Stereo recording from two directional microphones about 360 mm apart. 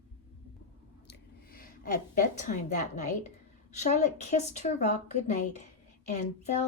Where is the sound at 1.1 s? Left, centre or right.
Left.